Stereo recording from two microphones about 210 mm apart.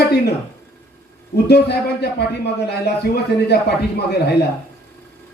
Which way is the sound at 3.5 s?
50° left (ahead or behind).